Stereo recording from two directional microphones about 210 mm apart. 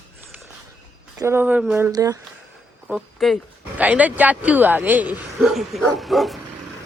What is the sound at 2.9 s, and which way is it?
Speech, centre (ahead or behind).